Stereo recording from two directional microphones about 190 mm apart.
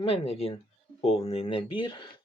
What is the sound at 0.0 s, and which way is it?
Speech, 30° left (ahead or behind).